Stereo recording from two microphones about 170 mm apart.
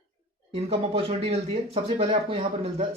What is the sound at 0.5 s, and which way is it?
Speech, 40° right (ahead or behind).